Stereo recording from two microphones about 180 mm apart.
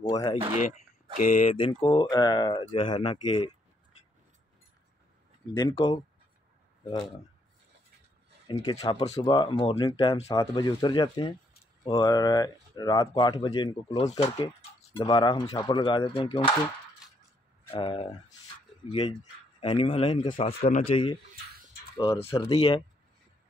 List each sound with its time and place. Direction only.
0.0 s a sound: 20° left (ahead or behind)
1.1 s speech: 45° left (ahead or behind); by 3.5 s 30° left (ahead or behind)
5.5 s speech: 25° left (ahead or behind)
8.6 s speech: 25° left (ahead or behind)
15.0 s speech: 25° left (ahead or behind)
17.7 s speech: 30° left (ahead or behind)